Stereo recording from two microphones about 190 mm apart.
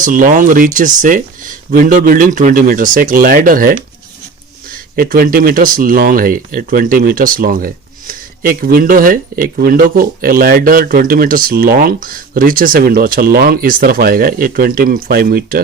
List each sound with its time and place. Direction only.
0.0 s speech: 45° right (ahead or behind)
4.9 s speech: 50° right (ahead or behind)